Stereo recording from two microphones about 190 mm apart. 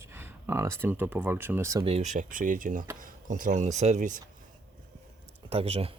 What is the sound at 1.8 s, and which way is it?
Speech, 35° right (ahead or behind).